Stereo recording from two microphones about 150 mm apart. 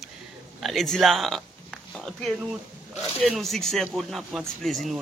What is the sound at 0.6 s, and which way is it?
A man's voice, centre (ahead or behind).